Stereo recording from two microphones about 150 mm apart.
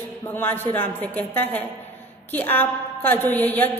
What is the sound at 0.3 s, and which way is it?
A woman's voice, 15° left (ahead or behind).